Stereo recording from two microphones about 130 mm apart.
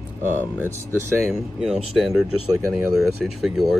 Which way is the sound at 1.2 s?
Centre (ahead or behind).